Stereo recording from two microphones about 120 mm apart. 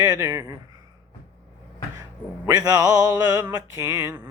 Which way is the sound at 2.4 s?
35° right (ahead or behind).